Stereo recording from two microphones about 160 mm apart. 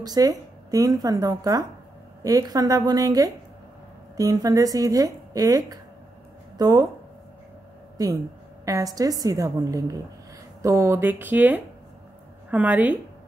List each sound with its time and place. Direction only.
0.0 s a woman's voice: 25° right (ahead or behind)
8.0 s a woman's voice: 25° right (ahead or behind)